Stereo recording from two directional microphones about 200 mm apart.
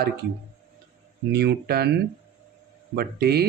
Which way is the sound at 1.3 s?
55° right (ahead or behind).